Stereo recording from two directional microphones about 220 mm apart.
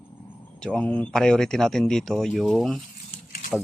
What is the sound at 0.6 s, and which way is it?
Speech, 5° left (ahead or behind).